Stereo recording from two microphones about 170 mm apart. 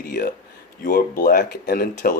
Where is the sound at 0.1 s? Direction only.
55° left (ahead or behind).